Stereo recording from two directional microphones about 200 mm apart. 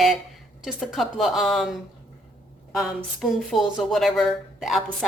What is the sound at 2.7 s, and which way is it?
Speech, centre (ahead or behind).